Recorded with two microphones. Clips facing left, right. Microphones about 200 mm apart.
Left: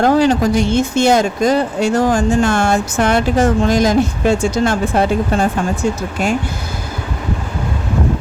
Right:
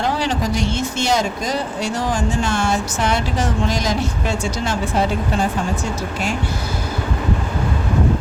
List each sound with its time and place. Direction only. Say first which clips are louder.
0.0 s speech: left 9 dB; 45° left (ahead or behind)